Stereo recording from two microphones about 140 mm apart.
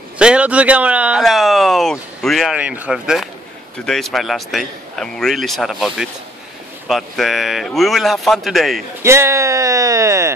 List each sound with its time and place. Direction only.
0.2 s speech: 10° right (ahead or behind)
9.0 s speech: 20° right (ahead or behind)